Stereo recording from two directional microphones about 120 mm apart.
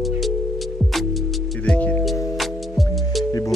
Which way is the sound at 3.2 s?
30° left (ahead or behind).